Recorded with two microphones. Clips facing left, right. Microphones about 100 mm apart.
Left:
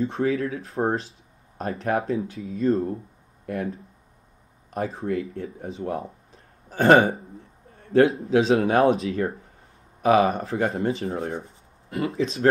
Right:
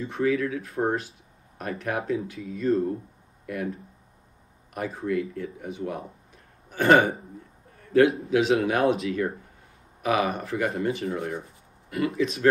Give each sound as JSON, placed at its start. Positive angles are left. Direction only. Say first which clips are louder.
{"t": 0.0, "sound": "speech", "louder": "left 1 dB", "side_deg": 30}